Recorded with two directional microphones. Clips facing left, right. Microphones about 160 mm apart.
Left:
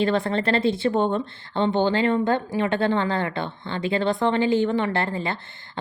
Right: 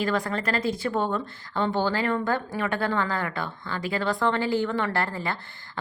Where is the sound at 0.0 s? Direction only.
25° left (ahead or behind).